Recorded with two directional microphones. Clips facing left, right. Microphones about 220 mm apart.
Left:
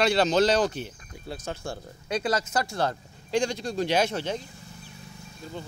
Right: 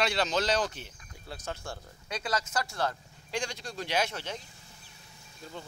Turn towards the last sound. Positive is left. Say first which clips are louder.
# left 7 dB
turn(degrees=30)  # may be behind; listen again after turning